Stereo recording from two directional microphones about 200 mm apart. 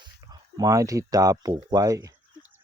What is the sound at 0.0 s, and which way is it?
Speech, 20° right (ahead or behind).